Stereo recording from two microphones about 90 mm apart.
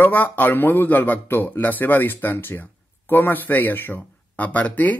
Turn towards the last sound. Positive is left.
turn(degrees=20)  # may be behind; listen again after turning